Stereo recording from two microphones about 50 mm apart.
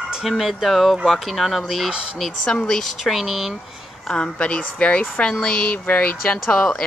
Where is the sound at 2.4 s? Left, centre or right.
Centre.